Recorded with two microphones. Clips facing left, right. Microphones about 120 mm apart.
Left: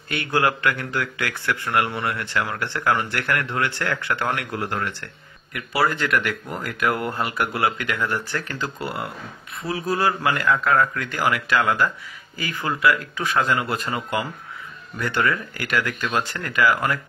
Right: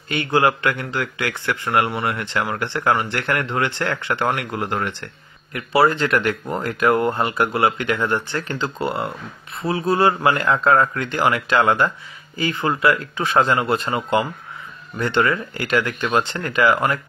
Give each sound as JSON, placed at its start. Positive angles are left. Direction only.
{"t": 0.1, "sound": "speech", "side_deg": -25}